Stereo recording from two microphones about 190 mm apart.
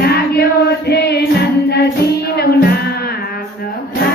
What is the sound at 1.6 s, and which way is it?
Music, 55° left (ahead or behind).